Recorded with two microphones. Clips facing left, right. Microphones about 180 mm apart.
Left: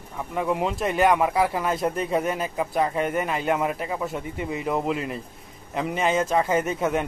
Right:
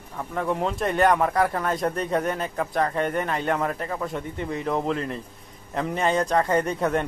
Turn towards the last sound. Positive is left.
turn(degrees=5)  # may be behind; listen again after turning